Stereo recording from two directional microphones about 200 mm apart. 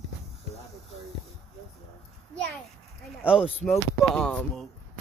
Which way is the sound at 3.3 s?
30° left (ahead or behind).